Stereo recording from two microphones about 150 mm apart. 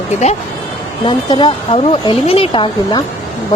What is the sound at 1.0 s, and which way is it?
Speech, 35° left (ahead or behind).